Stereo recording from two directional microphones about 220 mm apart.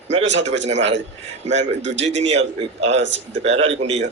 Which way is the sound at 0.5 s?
55° right (ahead or behind).